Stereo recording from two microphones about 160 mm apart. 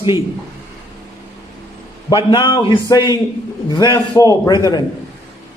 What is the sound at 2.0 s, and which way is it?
A man's voice, 30° left (ahead or behind).